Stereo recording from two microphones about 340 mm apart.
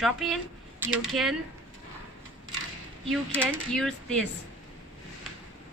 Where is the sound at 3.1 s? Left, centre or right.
Centre.